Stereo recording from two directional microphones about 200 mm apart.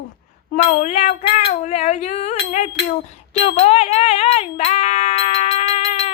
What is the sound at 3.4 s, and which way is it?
Music, 30° left (ahead or behind).